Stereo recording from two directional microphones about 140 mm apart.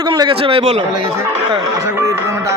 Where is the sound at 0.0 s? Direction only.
30° right (ahead or behind).